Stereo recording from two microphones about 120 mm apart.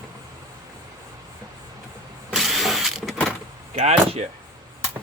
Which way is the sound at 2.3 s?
Centre (ahead or behind).